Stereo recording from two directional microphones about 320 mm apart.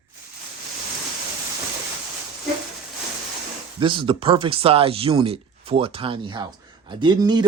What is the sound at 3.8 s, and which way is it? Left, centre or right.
Speech, centre.